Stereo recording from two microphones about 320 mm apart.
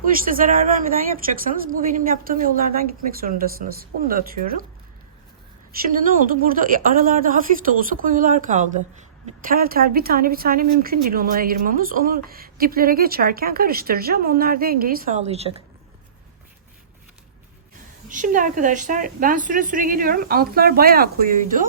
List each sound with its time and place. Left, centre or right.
0.0 s a woman's voice: right
5.8 s a woman's voice: right
18.1 s a woman's voice: right